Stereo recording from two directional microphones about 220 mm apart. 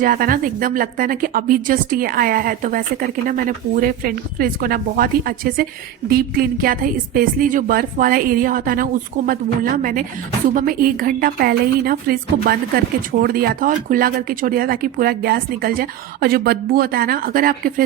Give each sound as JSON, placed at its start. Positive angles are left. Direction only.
{"t": 0.0, "sound": "speech", "side_deg": -40}